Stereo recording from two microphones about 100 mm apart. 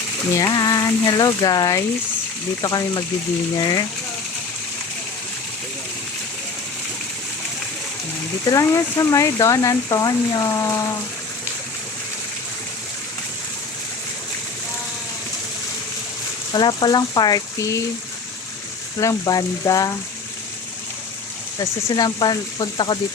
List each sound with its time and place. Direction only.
0.3 s speech: 40° left (ahead or behind)
8.4 s speech: 30° left (ahead or behind)
16.5 s speech: 45° left (ahead or behind); by 17.8 s 30° left (ahead or behind)
18.9 s speech: 35° left (ahead or behind)
21.6 s speech: 35° left (ahead or behind)